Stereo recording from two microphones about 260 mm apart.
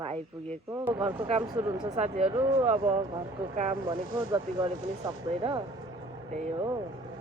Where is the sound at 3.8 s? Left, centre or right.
Centre.